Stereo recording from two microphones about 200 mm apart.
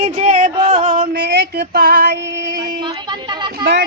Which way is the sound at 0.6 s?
25° right (ahead or behind).